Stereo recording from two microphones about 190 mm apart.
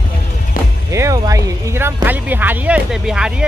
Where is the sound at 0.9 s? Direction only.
15° right (ahead or behind).